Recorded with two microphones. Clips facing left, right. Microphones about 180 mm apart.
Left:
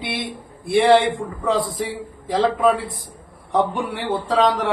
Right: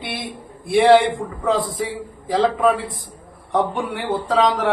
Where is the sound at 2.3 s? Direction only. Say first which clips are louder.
Even; centre (ahead or behind).